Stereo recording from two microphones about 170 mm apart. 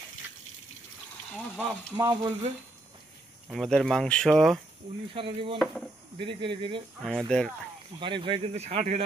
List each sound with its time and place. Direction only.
1.3 s speech: centre (ahead or behind)
2.0 s speech: 20° right (ahead or behind)
3.4 s speech: centre (ahead or behind)
5.1 s speech: 30° right (ahead or behind)
7.0 s speech: 5° left (ahead or behind)
8.0 s speech: 30° right (ahead or behind)
8.6 s speech: 40° right (ahead or behind)